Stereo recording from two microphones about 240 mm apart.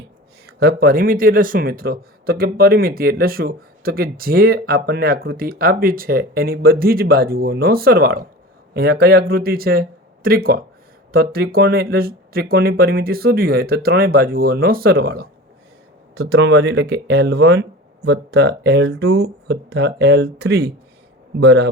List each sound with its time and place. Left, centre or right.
0.4 s speech: right